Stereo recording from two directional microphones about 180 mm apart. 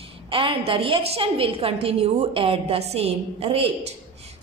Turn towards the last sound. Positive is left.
turn(degrees=-30)  # may be behind; listen again after turning